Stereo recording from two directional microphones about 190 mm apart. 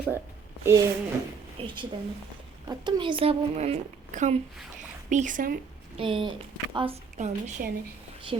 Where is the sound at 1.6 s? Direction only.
25° right (ahead or behind); by 5.6 s 45° right (ahead or behind).